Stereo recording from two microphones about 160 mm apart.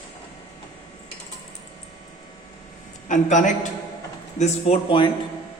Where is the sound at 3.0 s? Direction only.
50° left (ahead or behind).